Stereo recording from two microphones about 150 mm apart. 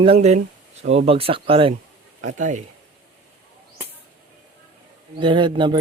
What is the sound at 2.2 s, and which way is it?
Speech, 55° right (ahead or behind).